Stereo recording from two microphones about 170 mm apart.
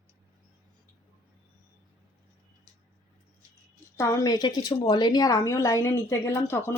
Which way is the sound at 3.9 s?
20° left (ahead or behind).